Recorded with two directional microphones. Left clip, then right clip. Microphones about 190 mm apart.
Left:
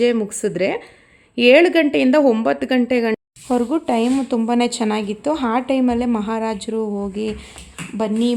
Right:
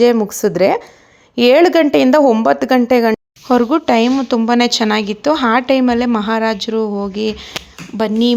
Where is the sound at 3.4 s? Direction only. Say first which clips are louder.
Right 7 dB; 20° right (ahead or behind).